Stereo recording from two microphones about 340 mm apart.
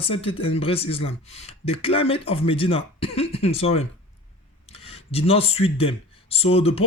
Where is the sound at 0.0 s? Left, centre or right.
Centre.